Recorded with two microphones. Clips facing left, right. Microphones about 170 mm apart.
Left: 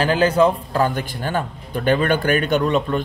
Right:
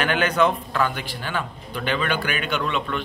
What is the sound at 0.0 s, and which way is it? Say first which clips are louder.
A man's voice: left 5 dB; 30° left (ahead or behind).